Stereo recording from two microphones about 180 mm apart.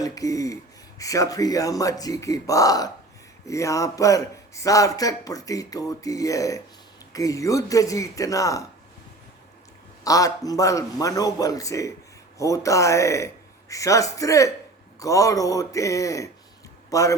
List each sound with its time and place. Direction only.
0.0 s a man's voice: 20° left (ahead or behind)
10.0 s a man's voice: 20° left (ahead or behind)